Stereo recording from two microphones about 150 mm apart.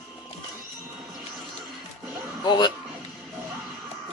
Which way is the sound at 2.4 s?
30° left (ahead or behind).